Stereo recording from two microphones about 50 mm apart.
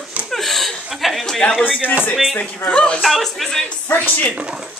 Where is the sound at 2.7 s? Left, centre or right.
Left.